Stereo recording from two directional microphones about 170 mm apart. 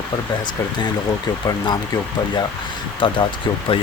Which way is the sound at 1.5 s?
25° left (ahead or behind).